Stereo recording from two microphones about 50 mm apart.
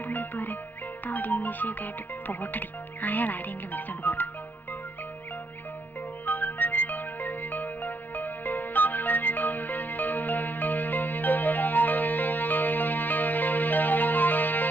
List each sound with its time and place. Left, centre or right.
0.0 s music: left
1.0 s speech: left
6.2 s music: left